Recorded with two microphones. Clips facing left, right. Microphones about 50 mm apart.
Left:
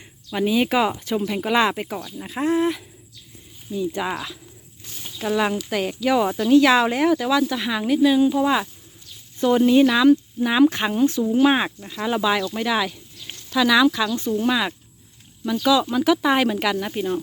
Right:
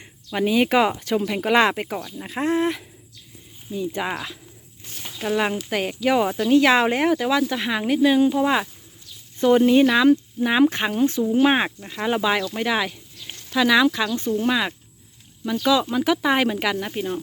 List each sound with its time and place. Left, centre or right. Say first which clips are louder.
0.3 s speech: right 1 dB; right
2.0 s speech: even; centre
2.2 s speech: left 1 dB; right
3.9 s speech: left 1 dB; right
4.9 s a sound: right 1 dB; right
5.2 s speech: left 1 dB; right
6.2 s speech: left 1 dB; centre
6.5 s speech: left 1 dB; right
14.4 s speech: left 1 dB; centre
16.8 s speech: left 2 dB; centre